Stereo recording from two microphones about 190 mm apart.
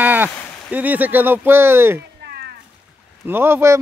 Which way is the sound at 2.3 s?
55° right (ahead or behind).